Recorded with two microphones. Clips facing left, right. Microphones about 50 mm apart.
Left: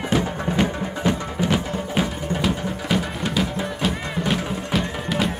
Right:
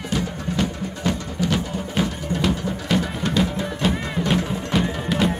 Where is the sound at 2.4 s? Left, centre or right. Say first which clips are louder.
Right 2 dB; centre.